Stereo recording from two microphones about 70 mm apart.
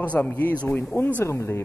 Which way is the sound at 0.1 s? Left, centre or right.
Left.